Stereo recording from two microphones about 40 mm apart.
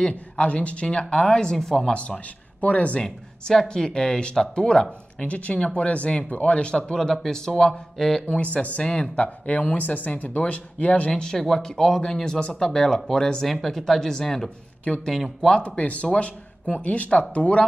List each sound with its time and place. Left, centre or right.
0.0 s speech: left; by 2.0 s centre
2.0 s speech: left
3.6 s speech: centre
5.3 s speech: left
7.0 s speech: centre
8.5 s speech: left
11.1 s speech: centre
11.3 s speech: centre
13.5 s speech: centre
15.5 s speech: left